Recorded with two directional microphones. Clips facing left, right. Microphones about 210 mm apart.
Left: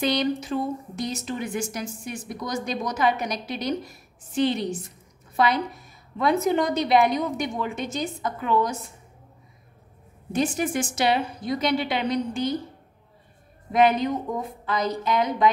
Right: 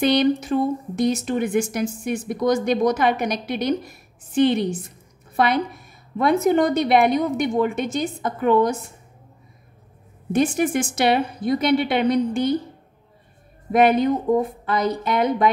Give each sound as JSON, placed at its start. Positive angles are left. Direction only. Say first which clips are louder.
{"t": 0.0, "sound": "a woman's voice", "louder": "right 6 dB", "side_deg": -60}
{"t": 10.3, "sound": "speech", "louder": "right 5 dB", "side_deg": -55}
{"t": 13.7, "sound": "speech", "louder": "right 4 dB", "side_deg": -55}